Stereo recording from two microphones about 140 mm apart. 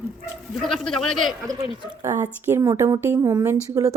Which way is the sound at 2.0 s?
15° right (ahead or behind).